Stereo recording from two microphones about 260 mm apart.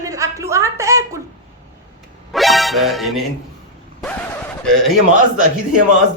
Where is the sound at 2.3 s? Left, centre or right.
Centre.